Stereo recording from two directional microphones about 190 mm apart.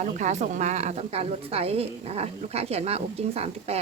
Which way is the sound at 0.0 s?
40° right (ahead or behind).